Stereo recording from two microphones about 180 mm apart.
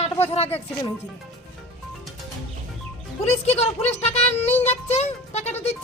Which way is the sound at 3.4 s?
35° left (ahead or behind).